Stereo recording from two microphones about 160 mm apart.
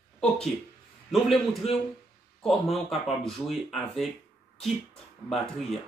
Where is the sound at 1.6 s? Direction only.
40° left (ahead or behind).